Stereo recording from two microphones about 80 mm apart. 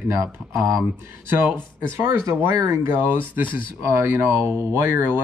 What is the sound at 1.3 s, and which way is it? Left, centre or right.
Speech, right.